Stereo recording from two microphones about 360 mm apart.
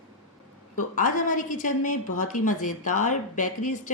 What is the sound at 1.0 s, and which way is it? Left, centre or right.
A woman's voice, left.